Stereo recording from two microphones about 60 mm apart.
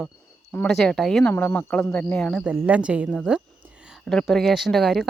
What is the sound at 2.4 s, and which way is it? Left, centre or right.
Speech, centre.